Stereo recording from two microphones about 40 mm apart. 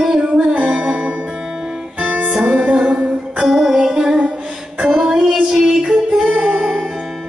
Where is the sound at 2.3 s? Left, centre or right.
Centre.